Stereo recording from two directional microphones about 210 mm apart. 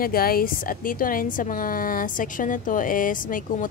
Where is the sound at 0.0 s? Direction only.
45° left (ahead or behind).